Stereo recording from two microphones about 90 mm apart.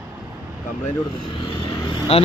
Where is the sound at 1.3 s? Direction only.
65° left (ahead or behind).